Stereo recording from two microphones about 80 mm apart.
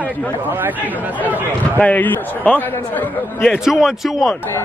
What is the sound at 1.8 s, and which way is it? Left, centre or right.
Speech, centre.